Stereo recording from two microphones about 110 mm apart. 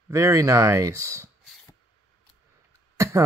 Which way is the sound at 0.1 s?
30° right (ahead or behind).